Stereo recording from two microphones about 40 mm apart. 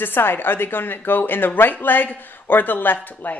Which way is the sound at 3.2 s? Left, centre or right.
Left.